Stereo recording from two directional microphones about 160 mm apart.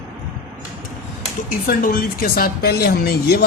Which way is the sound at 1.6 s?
60° left (ahead or behind).